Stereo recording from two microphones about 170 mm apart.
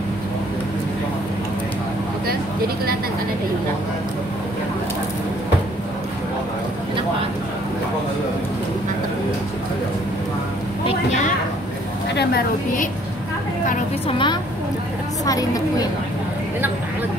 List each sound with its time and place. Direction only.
12.2 s a woman's voice: 65° left (ahead or behind)
14.0 s a woman's voice: 30° left (ahead or behind)